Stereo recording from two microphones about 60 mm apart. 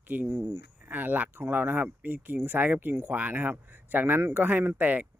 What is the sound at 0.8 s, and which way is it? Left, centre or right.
Speech, right.